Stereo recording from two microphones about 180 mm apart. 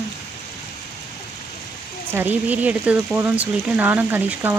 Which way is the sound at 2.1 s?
10° right (ahead or behind).